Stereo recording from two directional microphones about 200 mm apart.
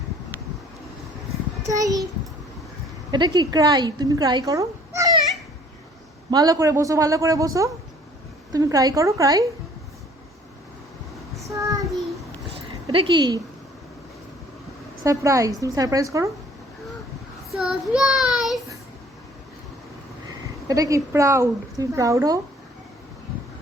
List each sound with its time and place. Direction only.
1.6 s child singing: 15° right (ahead or behind)
3.1 s a woman's voice: 20° right (ahead or behind)
6.3 s speech: 15° right (ahead or behind)
11.4 s child singing: 15° right (ahead or behind)
12.9 s a woman's voice: 25° right (ahead or behind)
15.0 s speech: 15° right (ahead or behind)
17.5 s child singing: centre (ahead or behind)
20.7 s speech: 15° right (ahead or behind)